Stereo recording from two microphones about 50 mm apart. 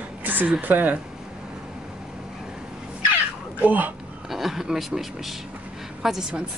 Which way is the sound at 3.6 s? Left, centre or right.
Right.